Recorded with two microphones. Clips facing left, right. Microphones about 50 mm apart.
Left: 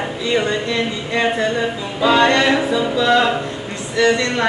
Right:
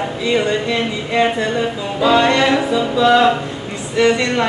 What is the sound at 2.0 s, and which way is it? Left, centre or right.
Music, centre.